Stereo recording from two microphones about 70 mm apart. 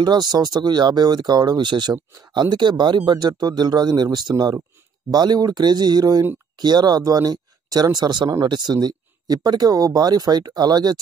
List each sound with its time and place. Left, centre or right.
0.0 s speech: right
6.6 s speech: right